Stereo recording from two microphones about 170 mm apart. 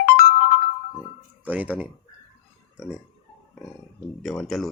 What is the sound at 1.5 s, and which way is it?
Speech, 10° right (ahead or behind).